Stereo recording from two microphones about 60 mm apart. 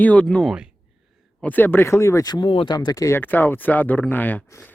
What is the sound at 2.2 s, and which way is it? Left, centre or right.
Speech, left.